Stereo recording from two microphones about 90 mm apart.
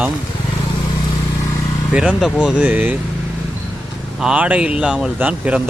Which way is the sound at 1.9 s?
10° right (ahead or behind).